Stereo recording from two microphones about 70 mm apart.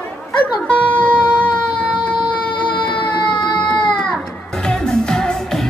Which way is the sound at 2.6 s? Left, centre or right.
Left.